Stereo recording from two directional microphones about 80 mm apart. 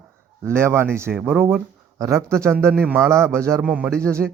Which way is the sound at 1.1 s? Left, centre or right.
Right.